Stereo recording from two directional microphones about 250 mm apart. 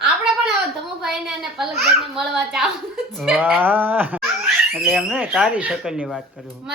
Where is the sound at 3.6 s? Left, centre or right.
Centre.